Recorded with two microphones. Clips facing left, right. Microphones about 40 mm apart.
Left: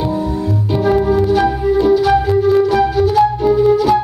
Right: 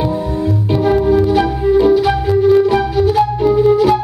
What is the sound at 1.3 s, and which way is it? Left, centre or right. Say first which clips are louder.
Music: right 1 dB; centre.